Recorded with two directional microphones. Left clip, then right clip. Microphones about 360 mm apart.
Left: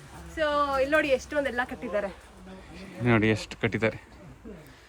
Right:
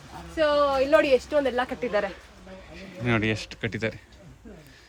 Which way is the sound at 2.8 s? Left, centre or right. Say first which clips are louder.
Left 1 dB; centre.